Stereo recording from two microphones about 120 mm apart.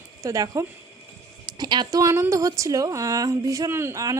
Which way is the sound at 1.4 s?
35° right (ahead or behind).